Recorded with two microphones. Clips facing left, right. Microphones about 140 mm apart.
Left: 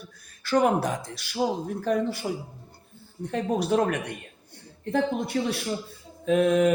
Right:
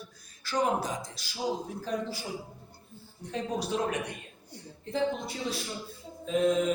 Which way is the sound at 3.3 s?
60° left (ahead or behind).